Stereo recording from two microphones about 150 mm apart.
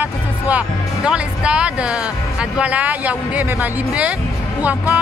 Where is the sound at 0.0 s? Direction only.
10° right (ahead or behind).